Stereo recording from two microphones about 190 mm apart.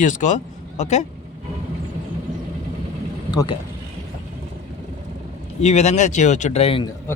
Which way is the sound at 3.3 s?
20° left (ahead or behind).